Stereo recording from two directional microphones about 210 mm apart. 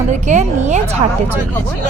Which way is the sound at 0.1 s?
35° right (ahead or behind).